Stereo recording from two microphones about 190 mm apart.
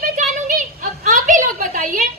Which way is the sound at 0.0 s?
45° right (ahead or behind).